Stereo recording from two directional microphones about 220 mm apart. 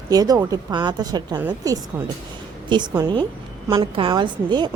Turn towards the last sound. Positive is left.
turn(degrees=-20)  # may be behind; listen again after turning